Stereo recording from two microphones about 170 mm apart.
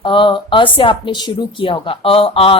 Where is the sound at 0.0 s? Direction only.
30° left (ahead or behind).